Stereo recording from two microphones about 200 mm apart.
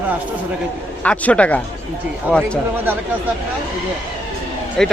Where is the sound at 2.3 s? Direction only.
5° right (ahead or behind).